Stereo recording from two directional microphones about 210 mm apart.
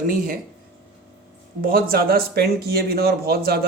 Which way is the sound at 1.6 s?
45° right (ahead or behind).